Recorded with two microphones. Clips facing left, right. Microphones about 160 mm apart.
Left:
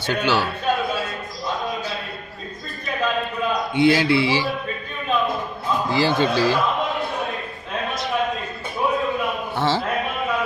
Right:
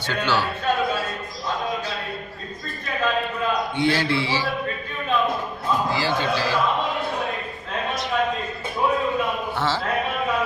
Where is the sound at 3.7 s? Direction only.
10° left (ahead or behind).